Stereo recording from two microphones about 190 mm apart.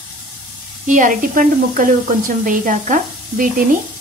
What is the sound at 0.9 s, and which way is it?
Speech, 45° right (ahead or behind).